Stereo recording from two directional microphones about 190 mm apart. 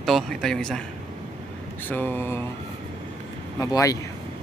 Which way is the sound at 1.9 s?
10° left (ahead or behind).